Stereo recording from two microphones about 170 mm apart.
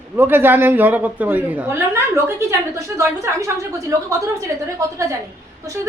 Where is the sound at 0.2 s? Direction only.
10° right (ahead or behind).